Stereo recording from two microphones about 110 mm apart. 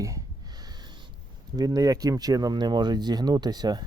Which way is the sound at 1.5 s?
35° right (ahead or behind).